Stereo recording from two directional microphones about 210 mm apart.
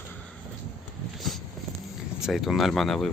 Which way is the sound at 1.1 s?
Centre (ahead or behind).